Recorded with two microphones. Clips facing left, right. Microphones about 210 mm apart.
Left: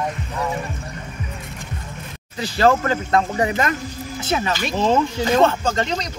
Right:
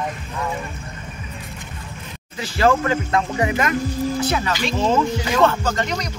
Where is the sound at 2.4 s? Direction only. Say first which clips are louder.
Left 1 dB; 35° left (ahead or behind).